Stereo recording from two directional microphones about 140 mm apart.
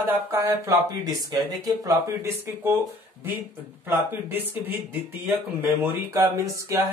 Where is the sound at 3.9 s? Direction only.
15° right (ahead or behind).